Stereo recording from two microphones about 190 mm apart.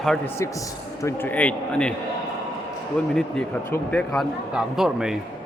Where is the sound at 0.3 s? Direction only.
15° left (ahead or behind).